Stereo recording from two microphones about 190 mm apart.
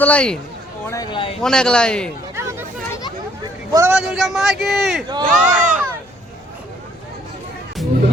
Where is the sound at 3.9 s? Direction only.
5° right (ahead or behind).